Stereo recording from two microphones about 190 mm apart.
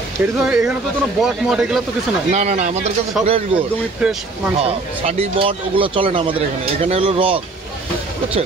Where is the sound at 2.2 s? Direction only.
35° right (ahead or behind).